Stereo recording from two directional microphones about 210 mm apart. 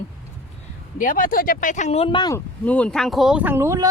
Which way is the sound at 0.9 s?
40° left (ahead or behind).